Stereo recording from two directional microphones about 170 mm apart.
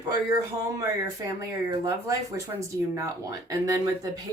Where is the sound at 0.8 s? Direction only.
15° right (ahead or behind).